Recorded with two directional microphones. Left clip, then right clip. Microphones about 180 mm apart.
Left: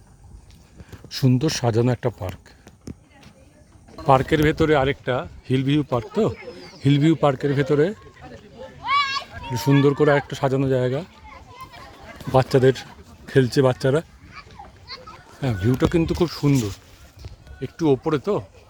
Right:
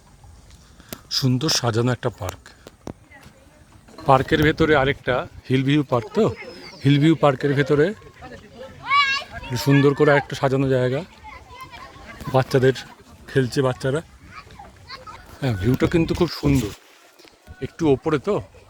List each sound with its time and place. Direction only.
1.1 s speech: 25° left (ahead or behind)
4.0 s speech: 5° left (ahead or behind)
8.8 s children playing: 60° left (ahead or behind)
9.5 s speech: 5° left (ahead or behind)
12.3 s speech: 15° left (ahead or behind)
13.2 s speech: 30° left (ahead or behind)
14.8 s speech: 5° right (ahead or behind)
16.6 s speech: 30° right (ahead or behind)
17.6 s speech: centre (ahead or behind)